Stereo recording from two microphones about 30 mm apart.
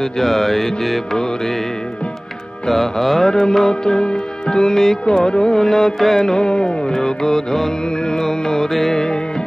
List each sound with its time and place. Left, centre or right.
0.2 s music: centre
2.7 s music: centre
3.3 s music: left
5.0 s music: left; by 6.3 s centre
6.3 s music: left